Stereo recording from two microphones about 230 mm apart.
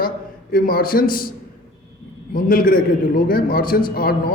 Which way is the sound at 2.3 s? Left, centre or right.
Left.